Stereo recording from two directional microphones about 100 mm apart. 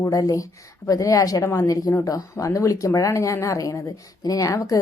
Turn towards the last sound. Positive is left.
turn(degrees=35)  # may be behind; listen again after turning